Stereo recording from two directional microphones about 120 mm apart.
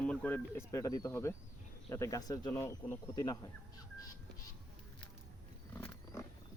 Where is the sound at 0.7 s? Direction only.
30° left (ahead or behind).